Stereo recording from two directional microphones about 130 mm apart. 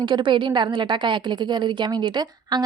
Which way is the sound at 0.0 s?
35° right (ahead or behind).